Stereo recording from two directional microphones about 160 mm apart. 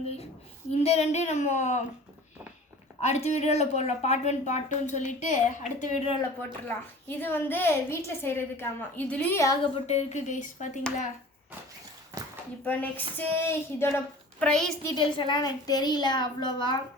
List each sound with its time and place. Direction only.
0.7 s a woman's voice: 40° left (ahead or behind)
3.0 s a woman's voice: 45° left (ahead or behind)
6.7 s a woman's voice: 10° left (ahead or behind)
9.7 s a woman's voice: 40° left (ahead or behind)
12.6 s a woman's voice: 10° left (ahead or behind)
14.3 s a woman's voice: 5° left (ahead or behind)
14.8 s a child's voice: 30° left (ahead or behind)